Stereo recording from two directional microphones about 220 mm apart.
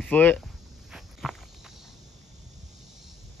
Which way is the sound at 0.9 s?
Centre (ahead or behind).